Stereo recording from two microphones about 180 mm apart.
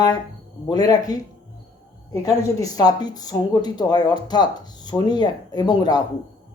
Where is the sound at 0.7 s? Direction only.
20° left (ahead or behind).